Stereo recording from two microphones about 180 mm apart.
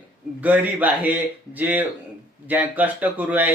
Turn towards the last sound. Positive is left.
turn(degrees=-10)  # may be behind; listen again after turning